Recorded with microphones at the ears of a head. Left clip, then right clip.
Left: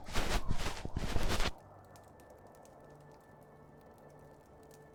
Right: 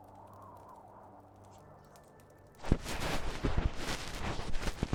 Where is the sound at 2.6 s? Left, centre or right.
Right.